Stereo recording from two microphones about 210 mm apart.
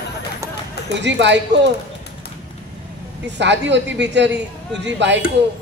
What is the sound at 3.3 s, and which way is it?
A man's voice, 55° right (ahead or behind).